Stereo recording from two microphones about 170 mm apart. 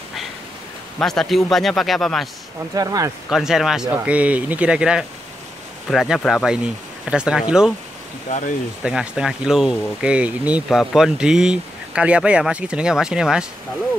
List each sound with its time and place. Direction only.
0.9 s speech: centre (ahead or behind)
2.7 s speech: 20° right (ahead or behind)
3.3 s speech: centre (ahead or behind)
8.3 s speech: 45° left (ahead or behind)
8.8 s speech: 5° right (ahead or behind)